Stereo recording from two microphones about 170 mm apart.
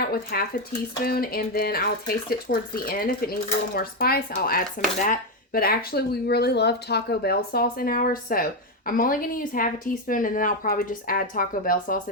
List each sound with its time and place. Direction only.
0.0 s speech: 60° left (ahead or behind)